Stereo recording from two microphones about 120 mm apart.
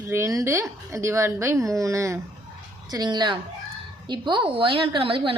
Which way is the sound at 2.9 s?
35° right (ahead or behind).